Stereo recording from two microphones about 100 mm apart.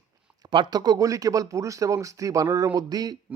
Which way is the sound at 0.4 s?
45° right (ahead or behind).